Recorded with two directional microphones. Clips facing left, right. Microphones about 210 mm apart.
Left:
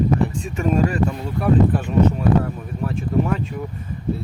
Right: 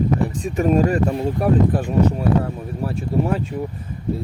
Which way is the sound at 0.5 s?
40° right (ahead or behind).